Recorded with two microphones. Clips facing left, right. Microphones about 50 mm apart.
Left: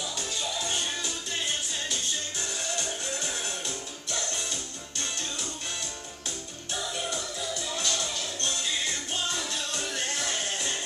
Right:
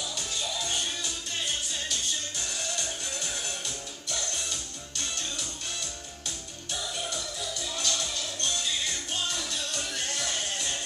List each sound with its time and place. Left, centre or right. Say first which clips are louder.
0.4 s music: left 1 dB; centre
2.8 s music: left 2 dB; centre
6.7 s music: left 2 dB; left